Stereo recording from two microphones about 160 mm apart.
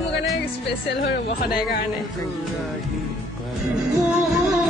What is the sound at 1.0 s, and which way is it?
Speech, 75° left (ahead or behind).